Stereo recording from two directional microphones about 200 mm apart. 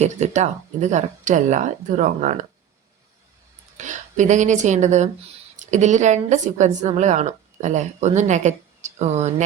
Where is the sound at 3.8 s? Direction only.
40° right (ahead or behind).